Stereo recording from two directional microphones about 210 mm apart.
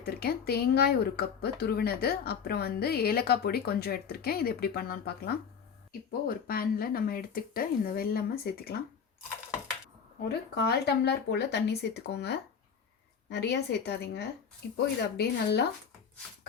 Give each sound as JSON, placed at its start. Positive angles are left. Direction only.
{"t": 0.0, "sound": "speech", "side_deg": 45}
{"t": 10.5, "sound": "speech", "side_deg": 50}